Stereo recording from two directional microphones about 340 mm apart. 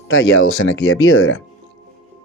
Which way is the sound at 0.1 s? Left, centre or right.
Left.